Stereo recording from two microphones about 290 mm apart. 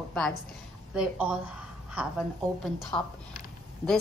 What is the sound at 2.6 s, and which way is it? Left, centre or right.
Speech, centre.